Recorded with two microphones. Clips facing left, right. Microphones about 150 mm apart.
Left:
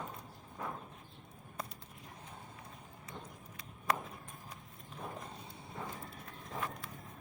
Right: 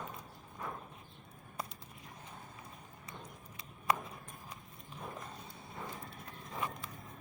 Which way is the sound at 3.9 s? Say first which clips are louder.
Right 1 dB; 5° right (ahead or behind).